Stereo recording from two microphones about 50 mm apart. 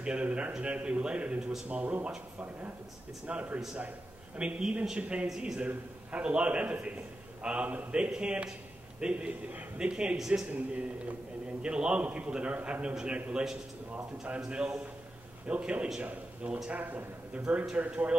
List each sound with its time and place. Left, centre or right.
0.0 s a man's voice: right
3.3 s a man's voice: right
10.5 s a man's voice: right
16.7 s a man's voice: right
17.3 s a man's voice: right